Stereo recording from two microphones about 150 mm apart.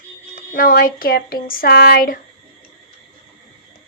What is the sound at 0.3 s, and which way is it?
Speech, 75° left (ahead or behind).